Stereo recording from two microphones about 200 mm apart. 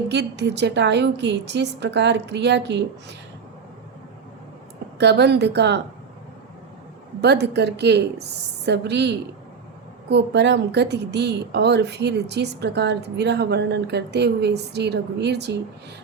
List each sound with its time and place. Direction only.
0.1 s a woman's voice: 60° right (ahead or behind)
4.9 s a woman's voice: 55° right (ahead or behind)
7.2 s a woman's voice: 55° right (ahead or behind)